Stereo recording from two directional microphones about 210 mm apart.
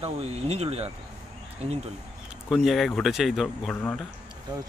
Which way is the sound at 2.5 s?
Centre (ahead or behind).